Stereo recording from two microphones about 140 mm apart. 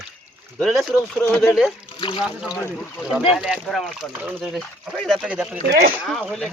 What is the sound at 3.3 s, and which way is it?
Speech, 5° right (ahead or behind).